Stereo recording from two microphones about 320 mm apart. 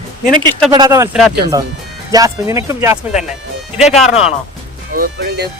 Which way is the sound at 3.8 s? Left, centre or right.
Centre.